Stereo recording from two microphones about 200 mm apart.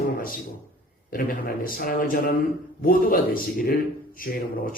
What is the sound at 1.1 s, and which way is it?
A man's voice, 45° left (ahead or behind).